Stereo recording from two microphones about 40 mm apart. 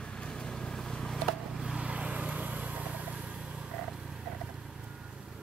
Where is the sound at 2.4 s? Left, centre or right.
Right.